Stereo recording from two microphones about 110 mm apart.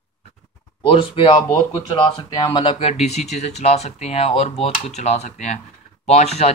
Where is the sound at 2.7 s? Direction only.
70° left (ahead or behind); by 5.6 s 90° left.